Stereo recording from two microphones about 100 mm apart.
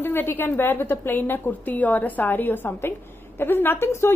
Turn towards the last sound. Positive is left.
turn(degrees=25)  # may be behind; listen again after turning